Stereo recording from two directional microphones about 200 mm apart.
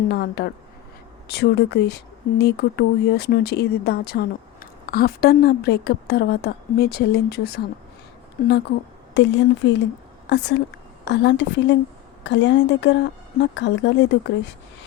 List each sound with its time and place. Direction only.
0.1 s a woman's voice: 55° left (ahead or behind)
9.1 s a woman's voice: 60° left (ahead or behind)